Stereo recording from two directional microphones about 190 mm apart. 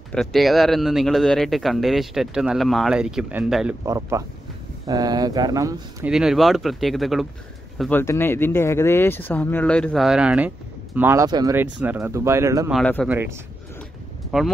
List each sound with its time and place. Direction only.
0.1 s speech: centre (ahead or behind)
3.8 s speech: 15° right (ahead or behind)
6.0 s speech: centre (ahead or behind)
8.0 s speech: 10° left (ahead or behind); by 11.6 s 20° right (ahead or behind)
11.6 s speech: 10° right (ahead or behind)
12.7 s speech: 5° left (ahead or behind)
14.3 s speech: centre (ahead or behind)